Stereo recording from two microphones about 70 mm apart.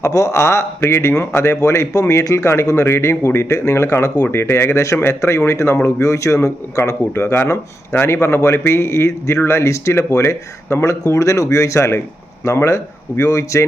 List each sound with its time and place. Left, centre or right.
0.0 s speech: left